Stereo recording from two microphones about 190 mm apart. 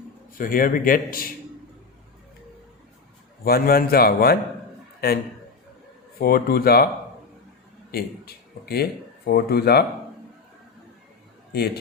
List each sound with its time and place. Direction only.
0.3 s a man's voice: 50° left (ahead or behind)
3.4 s a man's voice: 55° left (ahead or behind)
7.9 s speech: 55° left (ahead or behind)
11.5 s a man's voice: 60° left (ahead or behind)